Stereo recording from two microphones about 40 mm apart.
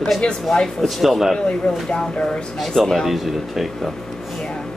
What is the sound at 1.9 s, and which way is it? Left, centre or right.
Speech, left.